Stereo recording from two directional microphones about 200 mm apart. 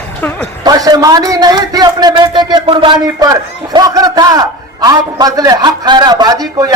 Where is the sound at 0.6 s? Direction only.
20° right (ahead or behind).